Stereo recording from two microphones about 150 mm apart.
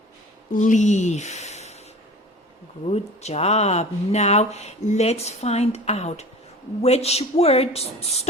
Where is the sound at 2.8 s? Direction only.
45° left (ahead or behind).